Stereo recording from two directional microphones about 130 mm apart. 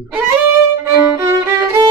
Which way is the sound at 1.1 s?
20° right (ahead or behind).